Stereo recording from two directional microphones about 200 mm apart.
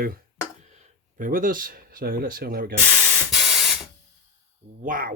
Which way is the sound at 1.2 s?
45° right (ahead or behind).